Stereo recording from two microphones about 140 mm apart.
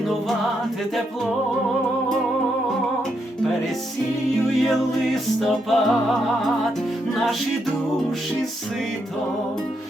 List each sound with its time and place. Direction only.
4.7 s music: centre (ahead or behind)